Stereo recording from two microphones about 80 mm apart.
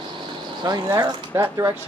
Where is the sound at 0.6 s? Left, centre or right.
Right.